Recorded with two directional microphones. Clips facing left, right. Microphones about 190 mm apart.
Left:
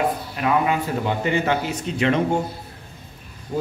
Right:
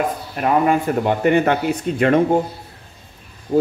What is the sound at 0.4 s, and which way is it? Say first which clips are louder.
A man's voice: right 5 dB; 45° right (ahead or behind).